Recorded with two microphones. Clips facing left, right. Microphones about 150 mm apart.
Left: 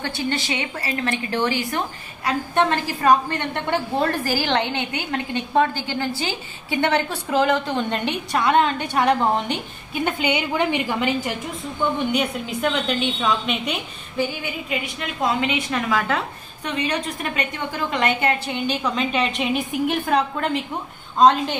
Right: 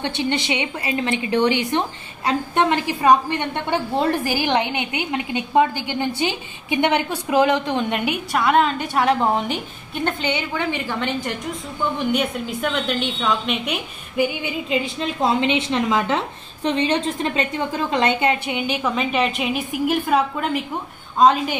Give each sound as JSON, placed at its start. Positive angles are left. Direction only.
{"t": 0.0, "sound": "a woman's voice", "side_deg": -20}
{"t": 10.0, "sound": "a woman's voice", "side_deg": 10}
{"t": 14.1, "sound": "a woman's voice", "side_deg": -15}
{"t": 14.7, "sound": "a woman's voice", "side_deg": -25}
{"t": 18.9, "sound": "a woman's voice", "side_deg": -5}